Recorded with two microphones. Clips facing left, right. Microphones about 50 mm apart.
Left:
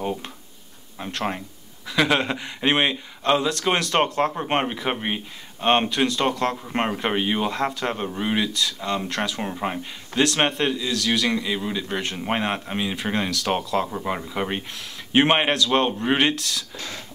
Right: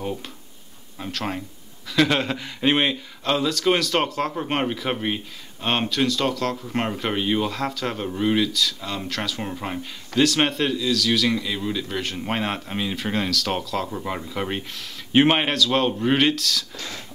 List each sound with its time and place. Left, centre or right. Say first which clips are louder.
1.0 s speech: left 1 dB; centre